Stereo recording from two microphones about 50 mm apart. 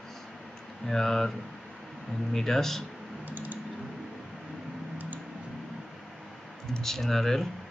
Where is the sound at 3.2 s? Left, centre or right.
Right.